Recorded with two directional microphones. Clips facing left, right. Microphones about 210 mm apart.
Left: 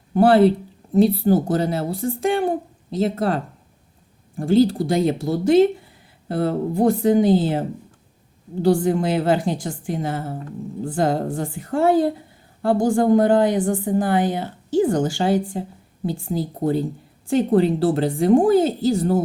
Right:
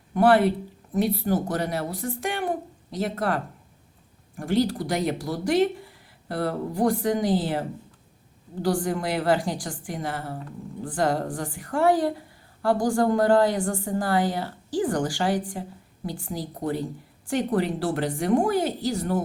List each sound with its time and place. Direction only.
0.1 s speech: 25° left (ahead or behind)
8.6 s speech: 25° left (ahead or behind)